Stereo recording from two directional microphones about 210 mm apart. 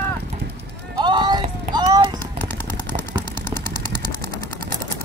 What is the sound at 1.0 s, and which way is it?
Clip-clop, 20° right (ahead or behind).